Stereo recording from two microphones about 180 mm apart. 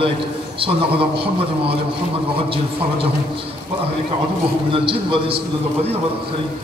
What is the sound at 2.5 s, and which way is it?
Speech, 30° right (ahead or behind).